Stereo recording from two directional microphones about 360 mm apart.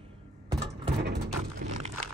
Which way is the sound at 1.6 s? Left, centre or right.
Right.